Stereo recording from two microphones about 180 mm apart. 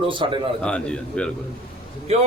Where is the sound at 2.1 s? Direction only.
35° right (ahead or behind).